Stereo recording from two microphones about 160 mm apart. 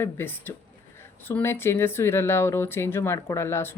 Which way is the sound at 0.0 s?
15° left (ahead or behind).